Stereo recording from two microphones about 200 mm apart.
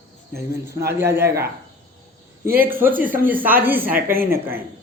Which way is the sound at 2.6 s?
10° right (ahead or behind).